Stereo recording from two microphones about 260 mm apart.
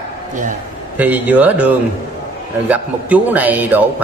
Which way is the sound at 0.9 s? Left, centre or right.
Centre.